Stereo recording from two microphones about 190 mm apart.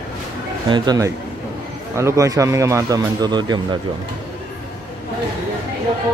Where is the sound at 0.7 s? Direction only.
20° right (ahead or behind).